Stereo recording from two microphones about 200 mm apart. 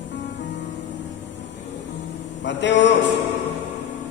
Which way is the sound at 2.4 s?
65° left (ahead or behind).